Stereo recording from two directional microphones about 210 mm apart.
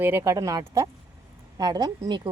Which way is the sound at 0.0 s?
10° right (ahead or behind).